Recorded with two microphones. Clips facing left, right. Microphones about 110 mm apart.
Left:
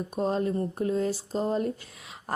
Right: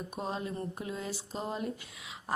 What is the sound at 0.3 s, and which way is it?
A woman's voice, 40° left (ahead or behind).